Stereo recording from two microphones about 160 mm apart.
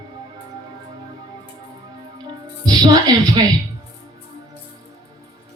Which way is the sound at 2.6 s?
25° right (ahead or behind).